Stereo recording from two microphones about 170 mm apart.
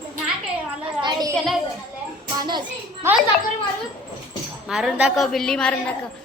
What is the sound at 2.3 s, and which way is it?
Speech, 25° right (ahead or behind).